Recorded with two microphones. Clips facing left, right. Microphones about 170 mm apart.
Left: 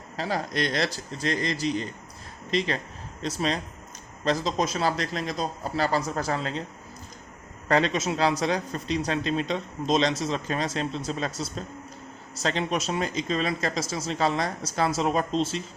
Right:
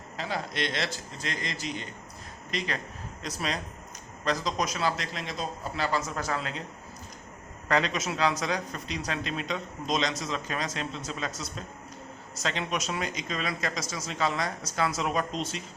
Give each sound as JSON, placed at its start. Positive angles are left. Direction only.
{"t": 0.2, "sound": "speech", "side_deg": 40}
{"t": 7.7, "sound": "speech", "side_deg": 35}